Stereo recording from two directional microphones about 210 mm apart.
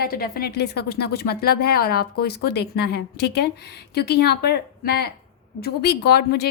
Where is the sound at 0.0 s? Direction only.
45° left (ahead or behind).